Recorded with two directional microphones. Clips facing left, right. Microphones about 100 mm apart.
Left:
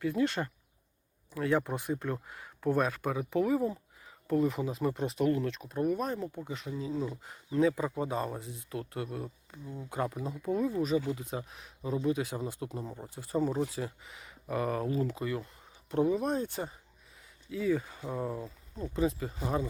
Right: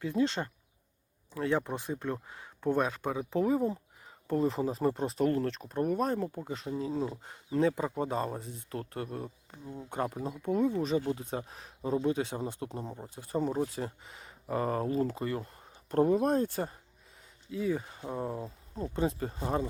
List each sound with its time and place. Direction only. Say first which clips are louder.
0.0 s speech: even; 20° right (ahead or behind); by 16.5 s 50° right (ahead or behind)
17.5 s speech: left 2 dB; 35° right (ahead or behind)
17.7 s speech: left 1 dB; 20° right (ahead or behind)
18.4 s speech: right 2 dB; 35° right (ahead or behind)